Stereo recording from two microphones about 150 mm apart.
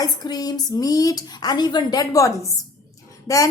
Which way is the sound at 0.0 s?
25° left (ahead or behind).